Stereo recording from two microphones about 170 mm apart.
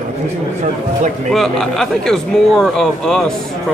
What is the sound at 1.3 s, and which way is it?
Speech, 5° left (ahead or behind).